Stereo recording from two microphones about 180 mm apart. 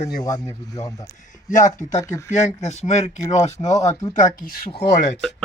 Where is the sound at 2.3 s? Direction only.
40° left (ahead or behind).